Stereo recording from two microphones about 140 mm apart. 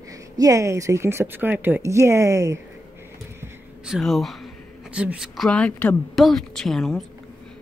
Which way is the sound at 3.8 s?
Centre (ahead or behind).